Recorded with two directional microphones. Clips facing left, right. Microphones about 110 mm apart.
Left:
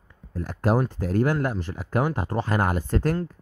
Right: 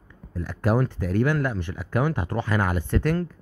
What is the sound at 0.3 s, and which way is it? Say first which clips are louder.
Speech: left 1 dB; 40° left (ahead or behind).